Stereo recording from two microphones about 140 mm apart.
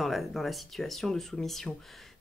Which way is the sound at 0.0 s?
Centre (ahead or behind).